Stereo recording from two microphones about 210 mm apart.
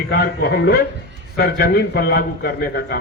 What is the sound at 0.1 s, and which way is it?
A man's voice, 50° left (ahead or behind).